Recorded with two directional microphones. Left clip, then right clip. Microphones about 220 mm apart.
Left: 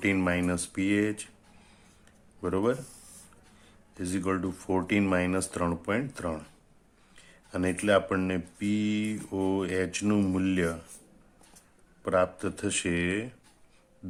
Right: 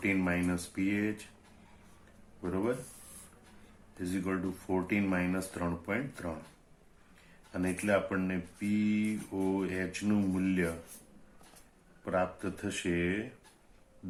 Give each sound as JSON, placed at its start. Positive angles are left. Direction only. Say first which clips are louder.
{"t": 0.0, "sound": "speech", "louder": "left 4 dB", "side_deg": 45}
{"t": 2.4, "sound": "speech", "louder": "left 6 dB", "side_deg": 45}
{"t": 3.9, "sound": "speech", "louder": "left 5 dB", "side_deg": 45}
{"t": 7.5, "sound": "speech", "louder": "left 6 dB", "side_deg": 45}
{"t": 12.0, "sound": "speech", "louder": "left 6 dB", "side_deg": 45}